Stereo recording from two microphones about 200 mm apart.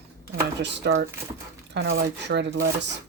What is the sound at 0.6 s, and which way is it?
Speech, 60° right (ahead or behind).